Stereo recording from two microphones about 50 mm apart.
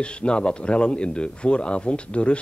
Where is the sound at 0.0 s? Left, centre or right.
Left.